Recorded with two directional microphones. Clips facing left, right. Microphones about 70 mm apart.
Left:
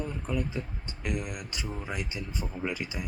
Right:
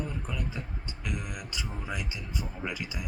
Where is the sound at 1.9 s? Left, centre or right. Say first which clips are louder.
Left 1 dB; left.